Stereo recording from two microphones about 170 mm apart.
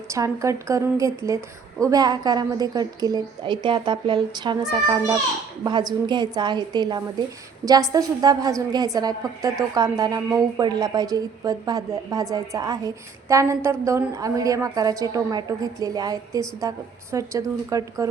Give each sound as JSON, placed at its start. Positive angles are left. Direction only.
{"t": 0.1, "sound": "a woman's voice", "side_deg": -20}